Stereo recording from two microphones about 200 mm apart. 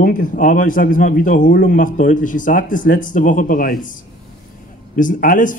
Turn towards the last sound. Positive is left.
turn(degrees=40)  # may be behind; listen again after turning